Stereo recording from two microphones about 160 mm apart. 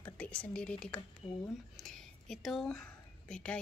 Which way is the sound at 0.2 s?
5° left (ahead or behind).